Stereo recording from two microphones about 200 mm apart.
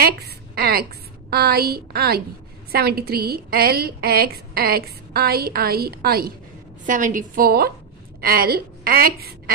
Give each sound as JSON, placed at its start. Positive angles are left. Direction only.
{"t": 0.6, "sound": "a woman's voice", "side_deg": -50}